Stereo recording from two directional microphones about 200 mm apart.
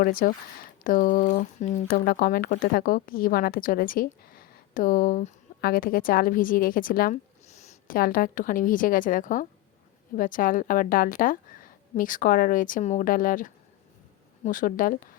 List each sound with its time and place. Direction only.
0.0 s speech: 45° left (ahead or behind)